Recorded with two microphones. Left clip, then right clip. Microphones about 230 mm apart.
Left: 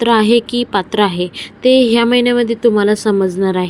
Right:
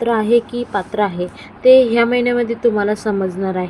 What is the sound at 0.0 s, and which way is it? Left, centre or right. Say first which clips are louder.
A woman's voice: left 3 dB; left.